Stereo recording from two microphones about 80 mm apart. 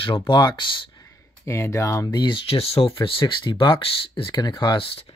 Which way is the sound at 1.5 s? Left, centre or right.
Left.